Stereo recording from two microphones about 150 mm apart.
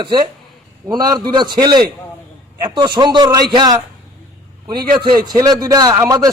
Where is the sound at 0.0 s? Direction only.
30° right (ahead or behind).